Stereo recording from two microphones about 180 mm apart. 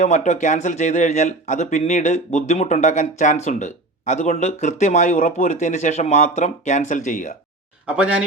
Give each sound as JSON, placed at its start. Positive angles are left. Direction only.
{"t": 0.0, "sound": "speech", "side_deg": 40}